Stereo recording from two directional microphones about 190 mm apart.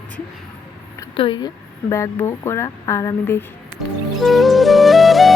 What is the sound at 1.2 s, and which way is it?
Speech, 25° left (ahead or behind).